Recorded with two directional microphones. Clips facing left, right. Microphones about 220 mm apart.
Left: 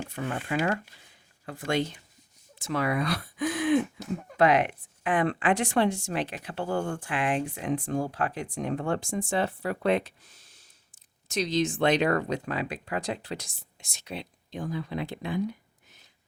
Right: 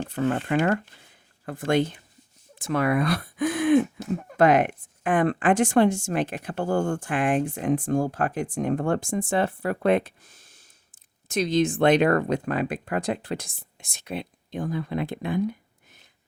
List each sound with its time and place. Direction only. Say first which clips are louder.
0.4 s speech: right 5 dB; 55° right (ahead or behind)